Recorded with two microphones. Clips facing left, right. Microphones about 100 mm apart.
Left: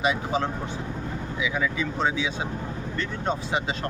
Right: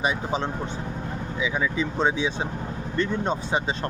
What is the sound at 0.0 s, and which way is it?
Speech, 30° right (ahead or behind).